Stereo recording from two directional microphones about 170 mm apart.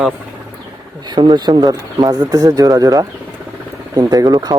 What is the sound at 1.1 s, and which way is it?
Speech, 25° right (ahead or behind).